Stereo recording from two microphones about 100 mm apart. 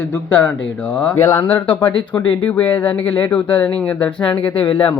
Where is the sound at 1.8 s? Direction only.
55° left (ahead or behind).